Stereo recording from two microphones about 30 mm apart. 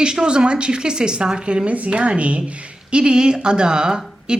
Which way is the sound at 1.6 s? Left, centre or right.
Right.